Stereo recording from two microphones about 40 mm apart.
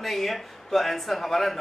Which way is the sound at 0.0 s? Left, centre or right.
Centre.